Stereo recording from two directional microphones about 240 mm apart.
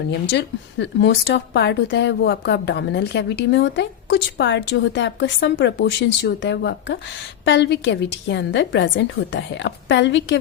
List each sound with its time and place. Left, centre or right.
0.1 s a woman's voice: left